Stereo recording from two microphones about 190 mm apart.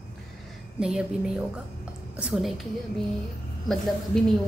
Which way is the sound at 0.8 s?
5° right (ahead or behind).